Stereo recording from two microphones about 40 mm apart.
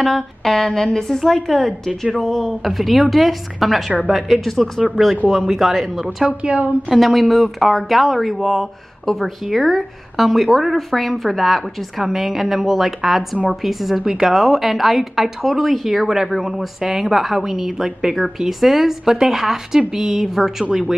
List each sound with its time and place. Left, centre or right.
0.0 s a woman's voice: centre
6.2 s a woman's voice: right
6.9 s a woman's voice: centre